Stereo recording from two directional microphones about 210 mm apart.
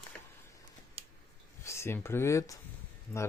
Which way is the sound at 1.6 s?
10° left (ahead or behind).